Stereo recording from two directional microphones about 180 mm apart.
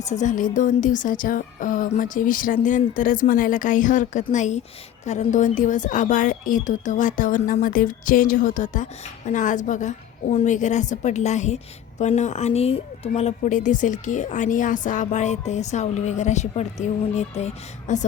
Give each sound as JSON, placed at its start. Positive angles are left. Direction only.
{"t": 0.0, "sound": "speech", "side_deg": 40}